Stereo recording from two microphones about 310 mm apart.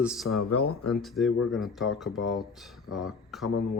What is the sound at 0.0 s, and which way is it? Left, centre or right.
Speech, centre.